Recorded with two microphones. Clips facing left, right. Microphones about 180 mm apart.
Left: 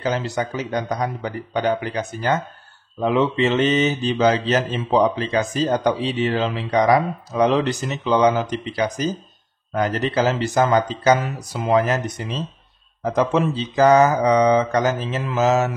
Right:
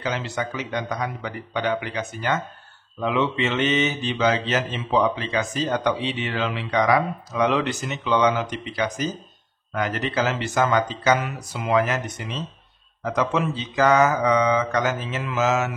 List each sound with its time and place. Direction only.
0.0 s speech: 40° left (ahead or behind)